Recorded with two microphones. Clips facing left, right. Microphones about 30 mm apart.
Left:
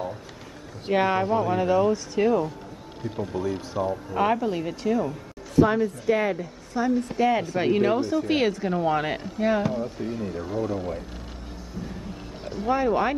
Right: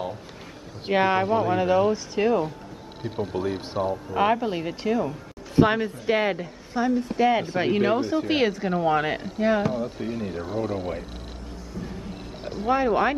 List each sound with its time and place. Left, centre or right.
0.8 s speech: centre
3.0 s speech: right
4.2 s speech: centre
5.6 s speech: right
6.9 s speech: centre; by 10.8 s right
12.4 s speech: centre